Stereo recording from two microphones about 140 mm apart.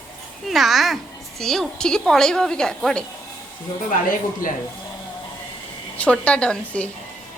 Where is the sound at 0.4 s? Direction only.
Centre (ahead or behind).